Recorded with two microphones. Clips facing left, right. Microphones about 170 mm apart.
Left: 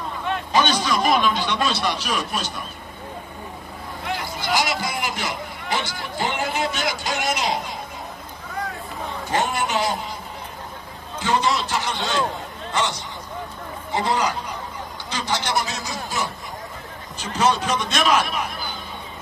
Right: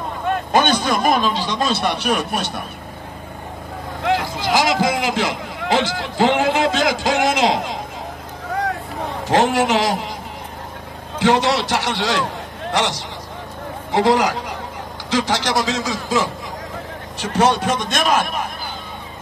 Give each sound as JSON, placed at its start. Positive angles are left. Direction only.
{"t": 0.3, "sound": "speech", "side_deg": -55}
{"t": 1.3, "sound": "speech", "side_deg": -35}
{"t": 1.7, "sound": "a man's voice", "side_deg": -55}
{"t": 4.0, "sound": "a man's voice", "side_deg": -90}
{"t": 9.3, "sound": "a man's voice", "side_deg": -90}
{"t": 11.1, "sound": "a man's voice", "side_deg": -90}
{"t": 13.9, "sound": "a man's voice", "side_deg": -90}
{"t": 17.2, "sound": "a man's voice", "side_deg": -60}